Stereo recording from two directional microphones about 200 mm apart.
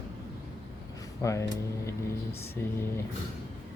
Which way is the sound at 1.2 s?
15° left (ahead or behind).